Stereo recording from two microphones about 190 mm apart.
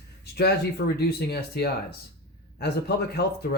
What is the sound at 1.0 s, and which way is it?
Speech, 60° left (ahead or behind).